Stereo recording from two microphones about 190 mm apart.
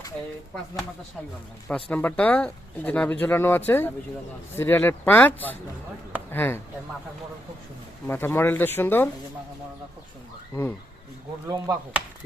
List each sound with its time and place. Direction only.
1.6 s speech: 10° left (ahead or behind)
8.0 s speech: 10° left (ahead or behind)
11.4 s speech: 20° right (ahead or behind)